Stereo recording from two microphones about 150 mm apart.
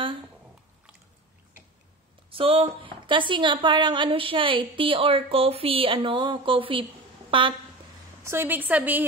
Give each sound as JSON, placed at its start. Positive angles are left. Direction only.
{"t": 2.3, "sound": "a woman's voice", "side_deg": -40}
{"t": 8.3, "sound": "a woman's voice", "side_deg": -15}